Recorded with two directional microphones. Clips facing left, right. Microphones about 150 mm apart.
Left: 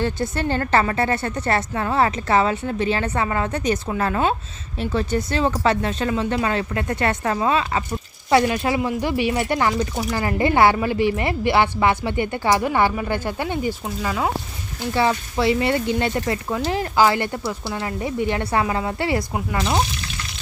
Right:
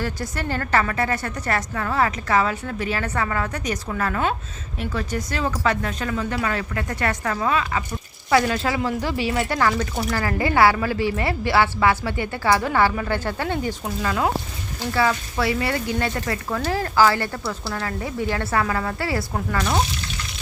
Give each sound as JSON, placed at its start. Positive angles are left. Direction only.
{"t": 0.0, "sound": "a woman's voice", "side_deg": 25}
{"t": 8.3, "sound": "a woman's voice", "side_deg": 20}
{"t": 13.8, "sound": "speech", "side_deg": 5}
{"t": 14.9, "sound": "a woman's voice", "side_deg": 25}